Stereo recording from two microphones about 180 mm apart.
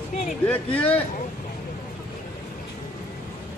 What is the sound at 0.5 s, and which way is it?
Speech, 10° left (ahead or behind).